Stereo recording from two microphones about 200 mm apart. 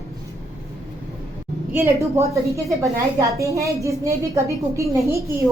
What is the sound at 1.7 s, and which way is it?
A woman's voice, 10° right (ahead or behind).